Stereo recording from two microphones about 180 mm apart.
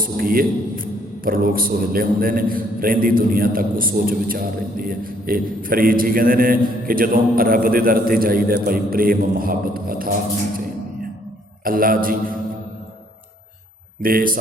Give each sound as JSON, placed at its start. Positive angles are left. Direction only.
{"t": 0.0, "sound": "a man's voice", "side_deg": -55}
{"t": 11.6, "sound": "a man's voice", "side_deg": -50}
{"t": 14.0, "sound": "a man's voice", "side_deg": -55}